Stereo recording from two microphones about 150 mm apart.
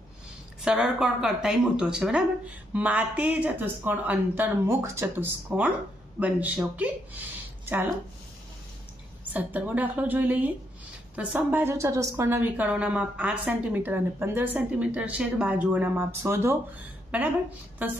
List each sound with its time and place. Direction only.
0.7 s a woman's voice: 5° right (ahead or behind)
9.3 s a woman's voice: 10° right (ahead or behind)